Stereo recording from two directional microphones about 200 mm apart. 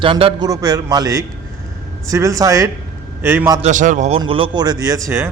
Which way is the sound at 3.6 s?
40° right (ahead or behind).